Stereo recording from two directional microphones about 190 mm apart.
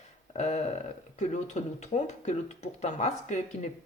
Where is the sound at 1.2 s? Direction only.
40° left (ahead or behind).